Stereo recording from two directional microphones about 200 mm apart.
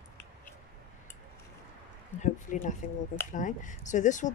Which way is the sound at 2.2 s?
40° left (ahead or behind).